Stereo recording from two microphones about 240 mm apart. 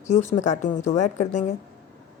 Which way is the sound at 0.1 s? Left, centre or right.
Left.